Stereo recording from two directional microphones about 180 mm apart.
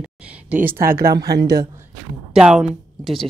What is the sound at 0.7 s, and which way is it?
Speech, 55° right (ahead or behind).